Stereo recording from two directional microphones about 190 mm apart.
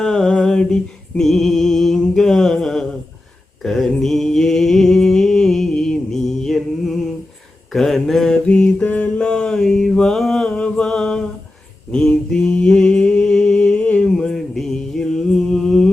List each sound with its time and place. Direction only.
0.0 s music: 5° left (ahead or behind)
3.6 s mantra: centre (ahead or behind)